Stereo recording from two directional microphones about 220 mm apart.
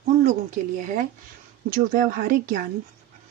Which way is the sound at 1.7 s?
35° right (ahead or behind).